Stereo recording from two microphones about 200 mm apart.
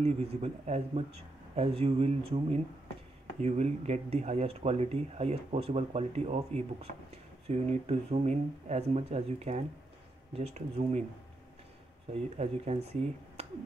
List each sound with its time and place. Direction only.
0.0 s speech: 30° right (ahead or behind)
12.1 s speech: 35° right (ahead or behind)